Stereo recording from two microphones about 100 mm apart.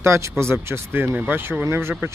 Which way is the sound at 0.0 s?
30° right (ahead or behind).